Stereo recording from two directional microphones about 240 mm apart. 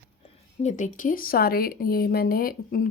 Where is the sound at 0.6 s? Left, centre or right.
Left.